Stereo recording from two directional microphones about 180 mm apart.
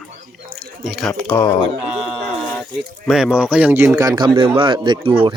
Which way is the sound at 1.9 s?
5° right (ahead or behind).